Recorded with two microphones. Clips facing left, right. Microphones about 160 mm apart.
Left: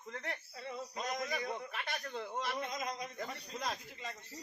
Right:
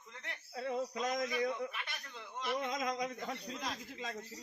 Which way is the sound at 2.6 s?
90° right.